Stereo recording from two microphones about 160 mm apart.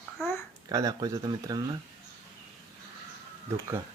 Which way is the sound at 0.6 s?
25° right (ahead or behind).